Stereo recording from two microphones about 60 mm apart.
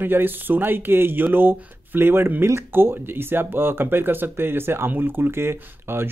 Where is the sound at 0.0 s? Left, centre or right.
Right.